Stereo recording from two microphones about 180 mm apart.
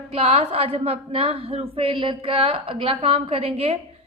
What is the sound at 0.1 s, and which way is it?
A woman's voice, 35° right (ahead or behind).